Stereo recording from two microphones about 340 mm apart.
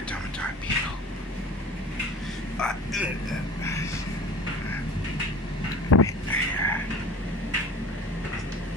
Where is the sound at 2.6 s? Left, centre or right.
Centre.